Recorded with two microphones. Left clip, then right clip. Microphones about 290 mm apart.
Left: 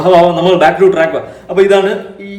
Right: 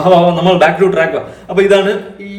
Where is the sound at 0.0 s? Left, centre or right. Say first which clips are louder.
Left 1 dB; centre.